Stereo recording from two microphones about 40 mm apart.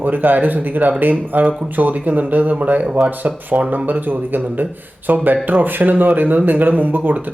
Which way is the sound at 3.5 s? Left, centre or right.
Right.